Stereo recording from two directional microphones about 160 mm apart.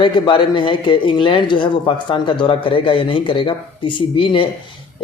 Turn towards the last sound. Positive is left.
turn(degrees=35)  # may be behind; listen again after turning